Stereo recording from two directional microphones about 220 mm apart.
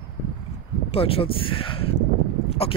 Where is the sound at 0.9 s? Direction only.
25° left (ahead or behind).